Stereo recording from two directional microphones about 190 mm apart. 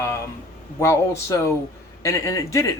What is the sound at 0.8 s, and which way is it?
Speech, 15° left (ahead or behind).